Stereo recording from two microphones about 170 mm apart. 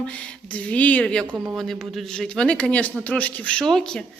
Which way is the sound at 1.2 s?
10° right (ahead or behind).